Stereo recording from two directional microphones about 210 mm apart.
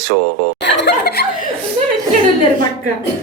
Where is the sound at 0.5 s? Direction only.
55° left (ahead or behind).